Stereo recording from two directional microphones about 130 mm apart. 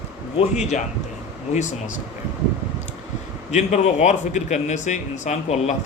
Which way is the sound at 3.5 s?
65° left (ahead or behind).